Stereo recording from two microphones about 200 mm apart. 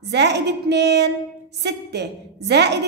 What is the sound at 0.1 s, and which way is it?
A woman's voice, 60° right (ahead or behind).